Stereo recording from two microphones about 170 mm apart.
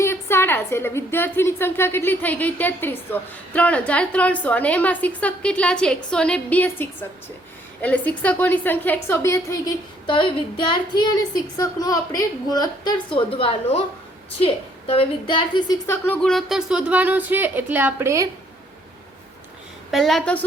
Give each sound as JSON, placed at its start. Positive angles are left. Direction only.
{"t": 0.0, "sound": "a woman's voice", "side_deg": 15}
{"t": 15.9, "sound": "speech", "side_deg": 10}
{"t": 19.9, "sound": "a woman's voice", "side_deg": 0}